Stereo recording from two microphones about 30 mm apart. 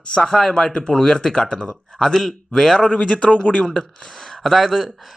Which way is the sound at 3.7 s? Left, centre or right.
Centre.